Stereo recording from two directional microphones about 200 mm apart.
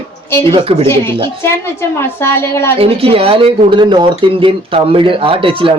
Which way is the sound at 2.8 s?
30° right (ahead or behind).